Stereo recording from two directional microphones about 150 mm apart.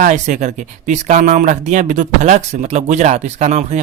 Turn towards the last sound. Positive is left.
turn(degrees=-50)  # may be behind; listen again after turning